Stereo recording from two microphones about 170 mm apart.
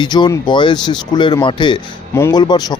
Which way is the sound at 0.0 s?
25° left (ahead or behind).